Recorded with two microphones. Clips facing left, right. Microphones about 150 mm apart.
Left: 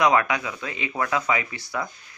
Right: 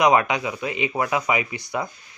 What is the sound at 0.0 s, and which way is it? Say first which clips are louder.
Speech: right 2 dB; 20° right (ahead or behind).